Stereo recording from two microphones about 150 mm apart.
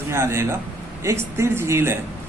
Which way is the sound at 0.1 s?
15° right (ahead or behind).